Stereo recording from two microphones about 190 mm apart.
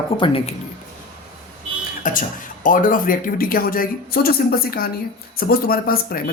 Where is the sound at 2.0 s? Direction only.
45° left (ahead or behind).